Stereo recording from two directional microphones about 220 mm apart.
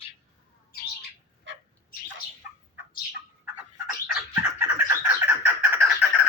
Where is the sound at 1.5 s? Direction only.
60° right (ahead or behind).